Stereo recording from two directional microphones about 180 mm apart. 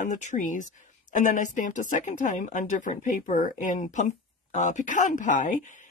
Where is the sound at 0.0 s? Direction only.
45° left (ahead or behind).